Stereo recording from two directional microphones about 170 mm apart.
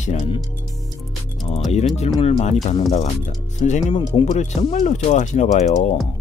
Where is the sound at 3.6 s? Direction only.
45° left (ahead or behind).